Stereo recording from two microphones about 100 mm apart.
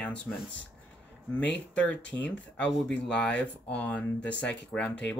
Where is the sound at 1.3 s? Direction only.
15° left (ahead or behind).